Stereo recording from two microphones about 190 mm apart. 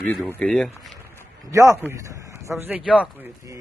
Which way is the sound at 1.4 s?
15° right (ahead or behind).